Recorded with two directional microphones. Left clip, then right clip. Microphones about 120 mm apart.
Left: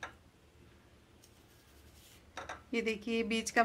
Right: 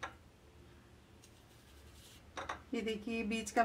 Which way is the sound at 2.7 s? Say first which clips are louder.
Left 6 dB; 30° left (ahead or behind).